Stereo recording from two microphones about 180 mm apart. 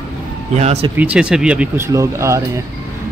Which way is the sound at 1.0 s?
5° right (ahead or behind).